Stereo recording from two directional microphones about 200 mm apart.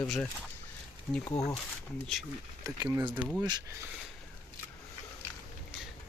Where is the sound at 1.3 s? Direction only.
15° left (ahead or behind).